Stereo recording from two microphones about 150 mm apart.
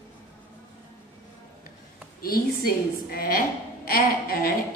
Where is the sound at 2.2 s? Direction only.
85° left.